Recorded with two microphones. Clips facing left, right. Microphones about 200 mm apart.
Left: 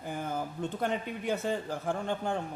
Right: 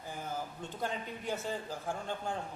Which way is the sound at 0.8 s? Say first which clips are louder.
Left 4 dB; 65° left (ahead or behind).